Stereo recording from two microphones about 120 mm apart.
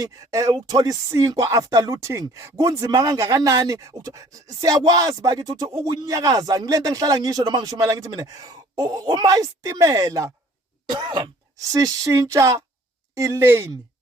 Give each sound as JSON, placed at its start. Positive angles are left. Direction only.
{"t": 0.0, "sound": "speech", "side_deg": -30}